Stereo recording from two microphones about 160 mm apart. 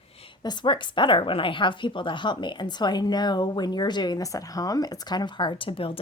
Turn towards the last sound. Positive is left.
turn(degrees=35)  # may be behind; listen again after turning